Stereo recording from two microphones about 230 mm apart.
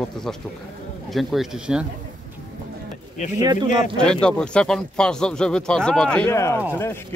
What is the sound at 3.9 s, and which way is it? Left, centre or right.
Speech, centre.